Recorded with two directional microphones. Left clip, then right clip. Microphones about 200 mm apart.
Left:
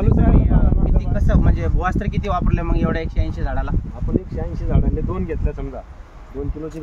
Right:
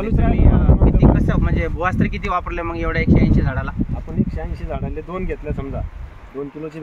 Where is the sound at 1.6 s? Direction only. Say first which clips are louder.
Right 3 dB; 35° left (ahead or behind).